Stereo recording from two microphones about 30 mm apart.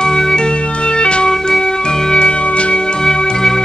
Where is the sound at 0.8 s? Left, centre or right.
Left.